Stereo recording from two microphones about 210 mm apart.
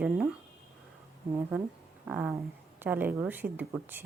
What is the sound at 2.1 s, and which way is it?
Speech, 10° right (ahead or behind).